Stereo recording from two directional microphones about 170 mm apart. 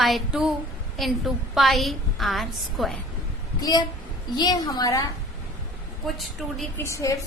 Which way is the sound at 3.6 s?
25° left (ahead or behind).